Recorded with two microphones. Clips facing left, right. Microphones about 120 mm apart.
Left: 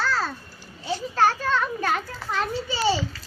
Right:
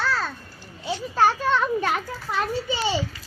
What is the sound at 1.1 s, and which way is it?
Children playing, 10° right (ahead or behind).